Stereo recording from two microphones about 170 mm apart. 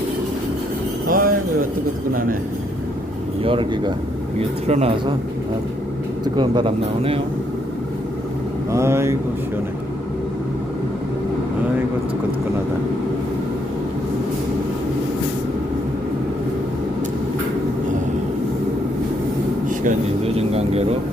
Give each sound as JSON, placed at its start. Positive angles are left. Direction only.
{"t": 1.0, "sound": "a sound", "side_deg": -55}
{"t": 3.4, "sound": "speech", "side_deg": -30}
{"t": 4.4, "sound": "speech", "side_deg": -40}
{"t": 6.2, "sound": "speech", "side_deg": -25}
{"t": 8.7, "sound": "speech", "side_deg": -15}
{"t": 20.2, "sound": "vehicle", "side_deg": -35}